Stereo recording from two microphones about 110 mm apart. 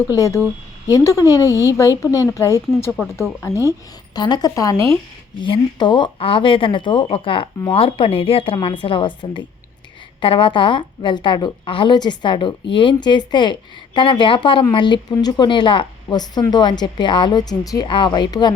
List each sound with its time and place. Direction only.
0.2 s speech: 30° left (ahead or behind)
4.2 s a woman's voice: 40° left (ahead or behind)
5.4 s a woman's voice: 45° left (ahead or behind)
16.0 s a woman's voice: 35° left (ahead or behind)
17.8 s a woman's voice: 50° left (ahead or behind)